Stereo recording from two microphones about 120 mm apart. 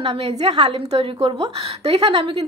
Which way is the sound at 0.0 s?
60° right (ahead or behind).